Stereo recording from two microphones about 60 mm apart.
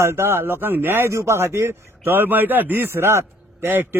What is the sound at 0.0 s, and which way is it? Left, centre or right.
A man's voice, right.